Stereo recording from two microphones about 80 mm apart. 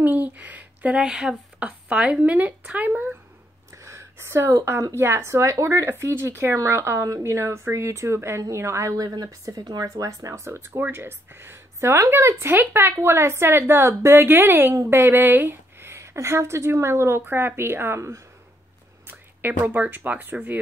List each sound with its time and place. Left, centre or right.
0.0 s speech: right
1.0 s a woman's voice: centre
3.7 s a sound: right
4.8 s speech: right
9.6 s speech: right
9.8 s a woman's voice: right
19.0 s speech: right